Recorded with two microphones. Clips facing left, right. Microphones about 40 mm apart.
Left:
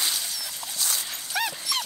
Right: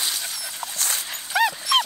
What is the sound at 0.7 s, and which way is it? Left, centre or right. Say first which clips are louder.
Dog: right 1 dB; right.